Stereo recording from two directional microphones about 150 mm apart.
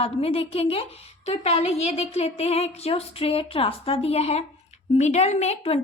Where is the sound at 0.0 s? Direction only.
40° left (ahead or behind).